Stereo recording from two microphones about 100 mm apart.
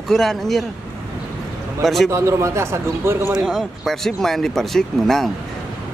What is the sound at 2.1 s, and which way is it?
A man's voice, 30° right (ahead or behind).